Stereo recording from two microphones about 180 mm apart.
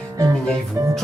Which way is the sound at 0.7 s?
15° right (ahead or behind).